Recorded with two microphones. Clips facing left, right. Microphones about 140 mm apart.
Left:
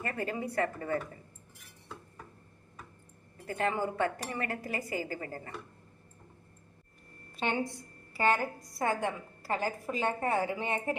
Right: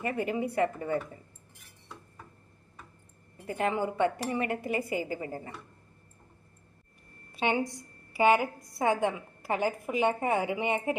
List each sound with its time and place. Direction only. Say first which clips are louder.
0.0 s a woman's voice: right 4 dB; 15° right (ahead or behind)
3.3 s speech: right 2 dB; 20° right (ahead or behind)
7.3 s a woman's voice: right 3 dB; 10° right (ahead or behind)